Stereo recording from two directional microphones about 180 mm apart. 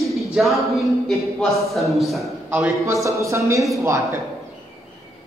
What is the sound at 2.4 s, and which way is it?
A man's voice, 10° right (ahead or behind).